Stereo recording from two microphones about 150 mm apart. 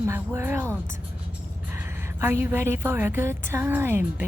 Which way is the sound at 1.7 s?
15° right (ahead or behind).